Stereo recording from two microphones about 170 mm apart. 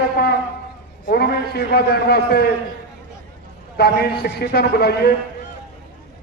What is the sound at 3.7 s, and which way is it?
A man's voice, 70° left (ahead or behind).